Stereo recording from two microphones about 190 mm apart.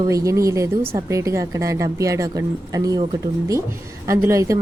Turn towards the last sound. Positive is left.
turn(degrees=-15)  # may be behind; listen again after turning